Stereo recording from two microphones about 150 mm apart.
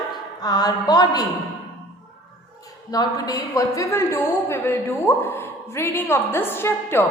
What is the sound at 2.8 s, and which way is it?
A woman's voice, 25° left (ahead or behind).